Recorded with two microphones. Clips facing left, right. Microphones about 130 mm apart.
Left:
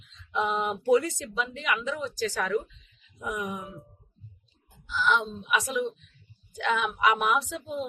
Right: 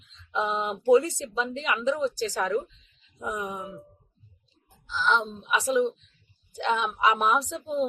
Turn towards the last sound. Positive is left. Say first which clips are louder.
# right 2 dB
turn(degrees=-35)  # may be behind; listen again after turning